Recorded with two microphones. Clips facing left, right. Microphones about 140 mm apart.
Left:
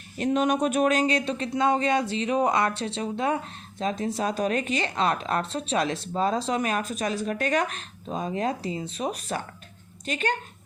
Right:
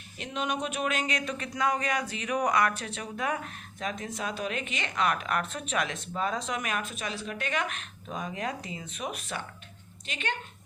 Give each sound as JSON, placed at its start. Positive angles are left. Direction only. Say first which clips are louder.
{"t": 0.2, "sound": "speech", "louder": "left 9 dB", "side_deg": 45}